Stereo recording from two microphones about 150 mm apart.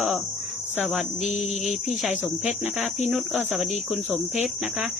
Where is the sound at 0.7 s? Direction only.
Centre (ahead or behind).